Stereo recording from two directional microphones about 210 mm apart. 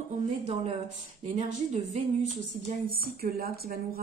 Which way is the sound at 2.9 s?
45° right (ahead or behind).